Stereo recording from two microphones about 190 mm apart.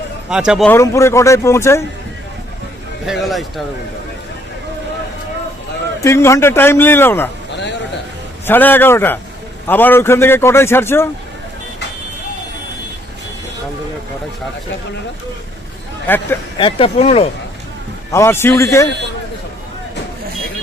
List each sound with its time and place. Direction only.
0.3 s a man's voice: 5° right (ahead or behind)
0.7 s a man's voice: 15° left (ahead or behind)
3.1 s a man's voice: centre (ahead or behind)
6.0 s a man's voice: 15° left (ahead or behind)
8.4 s a man's voice: 10° left (ahead or behind)
16.0 s a man's voice: 10° left (ahead or behind)
16.6 s speech: 25° left (ahead or behind)
18.1 s a man's voice: 15° left (ahead or behind)